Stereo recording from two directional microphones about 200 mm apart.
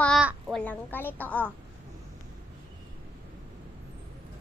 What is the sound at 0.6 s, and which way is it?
Speech, 10° left (ahead or behind).